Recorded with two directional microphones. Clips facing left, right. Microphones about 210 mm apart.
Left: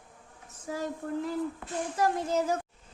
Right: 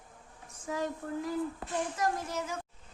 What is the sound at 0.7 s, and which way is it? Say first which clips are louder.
Speech: even; 35° left (ahead or behind).